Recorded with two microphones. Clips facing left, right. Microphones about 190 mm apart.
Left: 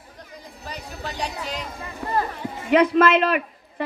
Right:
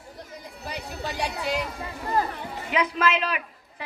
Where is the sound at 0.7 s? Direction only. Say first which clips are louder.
Right 1 dB; 10° right (ahead or behind).